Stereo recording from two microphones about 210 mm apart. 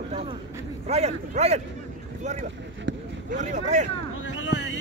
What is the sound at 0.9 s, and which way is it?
Speech, 30° right (ahead or behind).